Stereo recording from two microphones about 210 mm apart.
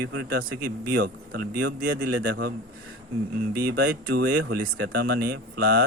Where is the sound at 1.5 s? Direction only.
90° right.